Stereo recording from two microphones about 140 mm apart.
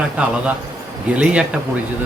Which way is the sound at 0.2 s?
10° right (ahead or behind).